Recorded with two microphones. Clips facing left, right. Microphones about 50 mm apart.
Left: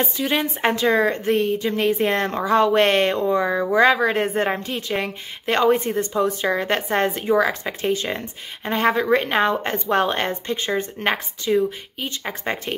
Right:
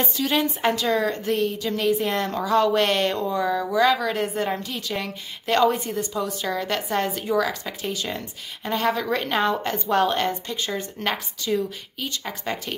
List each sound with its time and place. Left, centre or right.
0.0 s a woman's voice: left